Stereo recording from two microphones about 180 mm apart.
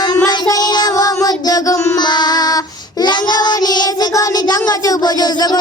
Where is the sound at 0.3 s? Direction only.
20° left (ahead or behind).